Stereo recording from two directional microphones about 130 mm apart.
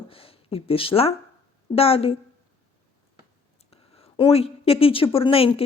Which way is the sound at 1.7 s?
50° left (ahead or behind).